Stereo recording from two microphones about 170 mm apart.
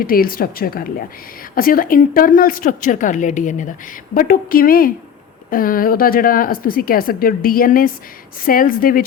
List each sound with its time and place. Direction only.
0.0 s a woman's voice: 55° left (ahead or behind)